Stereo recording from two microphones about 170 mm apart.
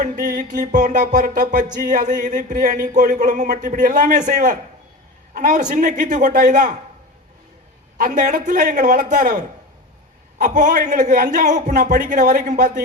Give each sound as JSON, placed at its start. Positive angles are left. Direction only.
{"t": 0.0, "sound": "music", "side_deg": -50}
{"t": 7.9, "sound": "music", "side_deg": -50}